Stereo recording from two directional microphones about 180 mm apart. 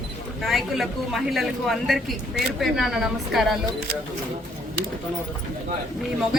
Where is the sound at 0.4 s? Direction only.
Centre (ahead or behind).